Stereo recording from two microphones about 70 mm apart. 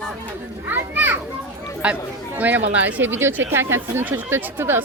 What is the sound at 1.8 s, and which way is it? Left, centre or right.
A man's voice, centre.